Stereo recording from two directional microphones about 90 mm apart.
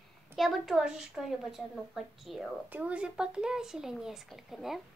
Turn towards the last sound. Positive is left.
turn(degrees=-5)  # may be behind; listen again after turning